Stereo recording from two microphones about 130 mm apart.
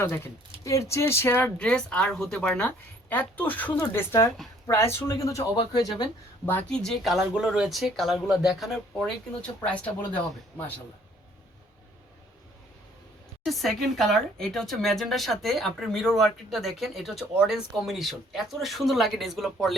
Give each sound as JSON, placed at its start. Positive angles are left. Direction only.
{"t": 0.6, "sound": "speech", "side_deg": 25}
{"t": 6.4, "sound": "speech", "side_deg": 15}
{"t": 13.4, "sound": "speech", "side_deg": 0}